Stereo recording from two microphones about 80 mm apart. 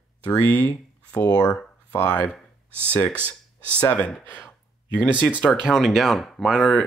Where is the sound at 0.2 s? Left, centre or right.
Centre.